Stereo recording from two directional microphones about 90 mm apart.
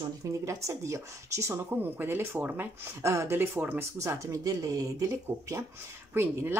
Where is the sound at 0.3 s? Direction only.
35° right (ahead or behind); by 2.7 s 20° right (ahead or behind).